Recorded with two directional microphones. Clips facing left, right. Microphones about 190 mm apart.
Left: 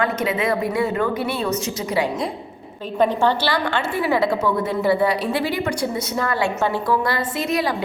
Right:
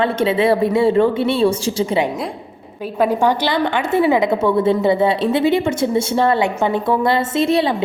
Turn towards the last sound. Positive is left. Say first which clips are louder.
# right 6 dB
turn(degrees=-25)  # may be behind; listen again after turning